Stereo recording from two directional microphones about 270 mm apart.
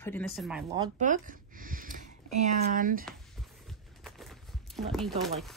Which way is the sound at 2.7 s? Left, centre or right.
Right.